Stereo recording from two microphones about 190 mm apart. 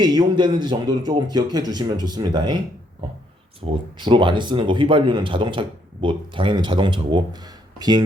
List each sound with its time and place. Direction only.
0.0 s speech: 20° right (ahead or behind)
3.7 s speech: 25° right (ahead or behind)